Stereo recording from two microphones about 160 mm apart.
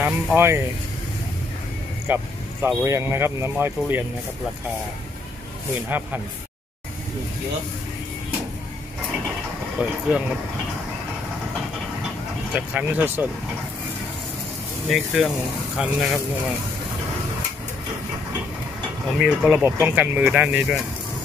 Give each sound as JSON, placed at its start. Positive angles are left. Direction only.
{"t": 0.0, "sound": "speech", "side_deg": -15}
{"t": 2.1, "sound": "speech", "side_deg": -10}
{"t": 5.9, "sound": "speech", "side_deg": -10}
{"t": 9.8, "sound": "speech", "side_deg": -5}
{"t": 12.5, "sound": "speech", "side_deg": -10}
{"t": 14.9, "sound": "speech", "side_deg": 0}
{"t": 19.1, "sound": "speech", "side_deg": -5}